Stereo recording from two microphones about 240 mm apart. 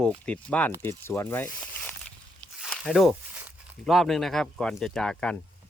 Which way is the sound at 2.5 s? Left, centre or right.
Centre.